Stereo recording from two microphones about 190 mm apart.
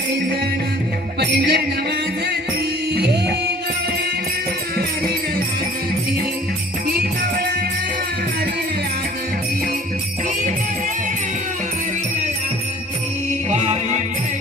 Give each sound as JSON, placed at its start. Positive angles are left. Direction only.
{"t": 1.2, "sound": "music", "side_deg": -60}
{"t": 2.9, "sound": "music", "side_deg": -60}
{"t": 6.8, "sound": "music", "side_deg": -55}
{"t": 13.5, "sound": "music", "side_deg": -35}